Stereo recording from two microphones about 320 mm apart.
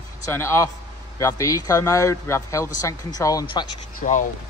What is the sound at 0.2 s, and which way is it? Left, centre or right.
A man's voice, centre.